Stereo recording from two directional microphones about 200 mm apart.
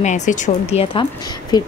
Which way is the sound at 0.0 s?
35° left (ahead or behind).